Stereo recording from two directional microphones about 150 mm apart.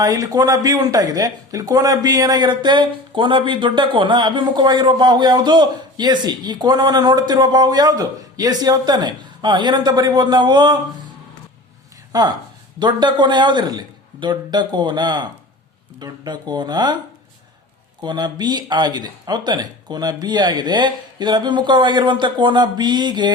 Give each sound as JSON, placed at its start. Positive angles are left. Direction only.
{"t": 0.0, "sound": "speech", "side_deg": -25}
{"t": 12.1, "sound": "a man's voice", "side_deg": -25}
{"t": 18.0, "sound": "speech", "side_deg": -30}